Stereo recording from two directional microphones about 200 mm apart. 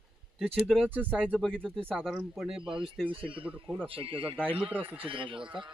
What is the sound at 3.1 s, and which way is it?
Speech, 25° right (ahead or behind).